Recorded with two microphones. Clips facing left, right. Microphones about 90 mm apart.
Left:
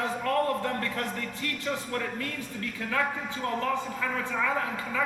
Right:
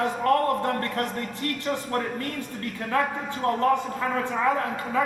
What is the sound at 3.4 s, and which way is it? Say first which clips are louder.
Speech: right 6 dB; 45° right (ahead or behind).